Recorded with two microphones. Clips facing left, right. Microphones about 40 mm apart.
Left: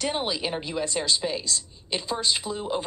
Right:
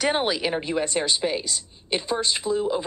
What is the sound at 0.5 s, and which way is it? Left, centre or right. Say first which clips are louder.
Speech: right 4 dB; right.